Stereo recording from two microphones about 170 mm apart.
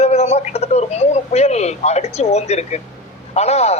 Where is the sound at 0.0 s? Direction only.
40° left (ahead or behind).